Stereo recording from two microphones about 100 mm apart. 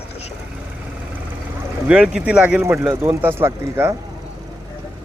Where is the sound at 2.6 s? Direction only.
25° right (ahead or behind).